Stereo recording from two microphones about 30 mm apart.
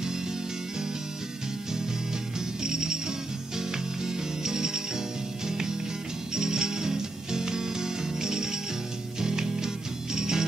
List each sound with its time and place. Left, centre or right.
2.6 s music: right
6.3 s music: centre